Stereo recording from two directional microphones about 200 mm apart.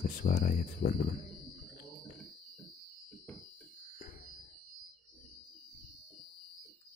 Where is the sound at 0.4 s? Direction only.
40° left (ahead or behind).